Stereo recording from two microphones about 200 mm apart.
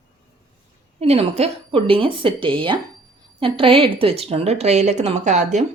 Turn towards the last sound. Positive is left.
turn(degrees=-35)  # may be behind; listen again after turning